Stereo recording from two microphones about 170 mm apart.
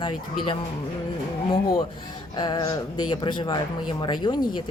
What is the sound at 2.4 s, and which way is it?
Speech, 25° left (ahead or behind).